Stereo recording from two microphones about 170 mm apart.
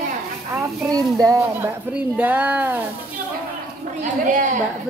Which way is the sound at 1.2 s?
15° right (ahead or behind).